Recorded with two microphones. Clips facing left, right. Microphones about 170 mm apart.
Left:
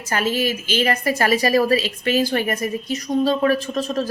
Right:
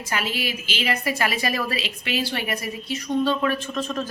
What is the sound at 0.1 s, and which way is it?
Speech, 45° left (ahead or behind).